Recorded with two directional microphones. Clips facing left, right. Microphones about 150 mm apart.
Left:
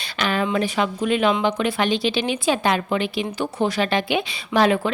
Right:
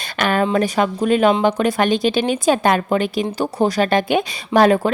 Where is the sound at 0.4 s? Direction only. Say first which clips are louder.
Right 4 dB; 45° right (ahead or behind).